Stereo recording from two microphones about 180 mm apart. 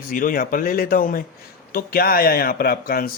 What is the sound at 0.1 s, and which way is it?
Speech, 50° left (ahead or behind).